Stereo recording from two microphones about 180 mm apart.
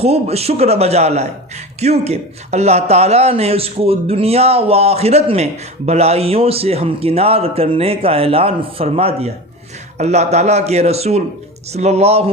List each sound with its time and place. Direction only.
0.0 s a man's voice: 35° right (ahead or behind)